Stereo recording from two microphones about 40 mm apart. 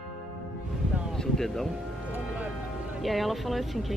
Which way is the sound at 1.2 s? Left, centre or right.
Centre.